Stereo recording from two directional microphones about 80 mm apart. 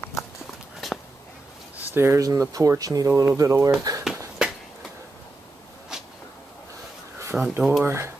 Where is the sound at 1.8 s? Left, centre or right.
Right.